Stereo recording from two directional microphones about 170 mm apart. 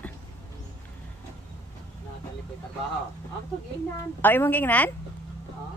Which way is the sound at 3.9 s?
15° left (ahead or behind).